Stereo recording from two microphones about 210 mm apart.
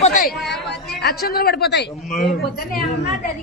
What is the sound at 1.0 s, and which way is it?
Speech, 50° left (ahead or behind).